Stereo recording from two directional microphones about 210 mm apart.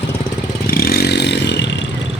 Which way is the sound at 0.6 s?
45° left (ahead or behind).